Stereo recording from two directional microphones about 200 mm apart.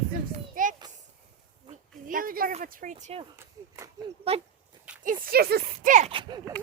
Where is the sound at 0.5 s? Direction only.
40° right (ahead or behind).